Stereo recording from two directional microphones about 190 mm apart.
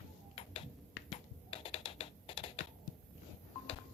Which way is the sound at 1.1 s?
30° left (ahead or behind).